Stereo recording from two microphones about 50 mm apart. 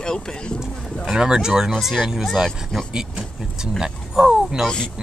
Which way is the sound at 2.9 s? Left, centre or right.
Centre.